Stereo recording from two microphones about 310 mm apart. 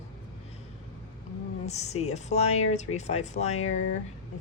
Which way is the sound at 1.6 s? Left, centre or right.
Left.